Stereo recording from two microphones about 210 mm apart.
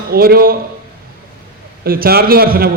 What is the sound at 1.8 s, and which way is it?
Speech, 45° right (ahead or behind).